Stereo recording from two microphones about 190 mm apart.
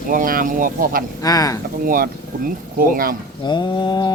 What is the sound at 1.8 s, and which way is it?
Speech, 50° right (ahead or behind).